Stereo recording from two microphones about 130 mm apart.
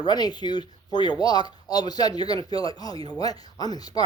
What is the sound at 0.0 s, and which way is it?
Speech, 35° left (ahead or behind).